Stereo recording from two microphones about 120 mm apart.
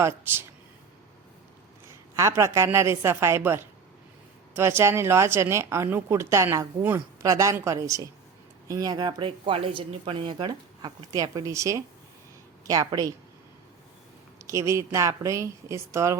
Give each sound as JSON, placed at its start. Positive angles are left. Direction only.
{"t": 0.0, "sound": "speech", "side_deg": -20}
{"t": 2.1, "sound": "speech", "side_deg": -25}
{"t": 14.3, "sound": "a man's voice", "side_deg": -25}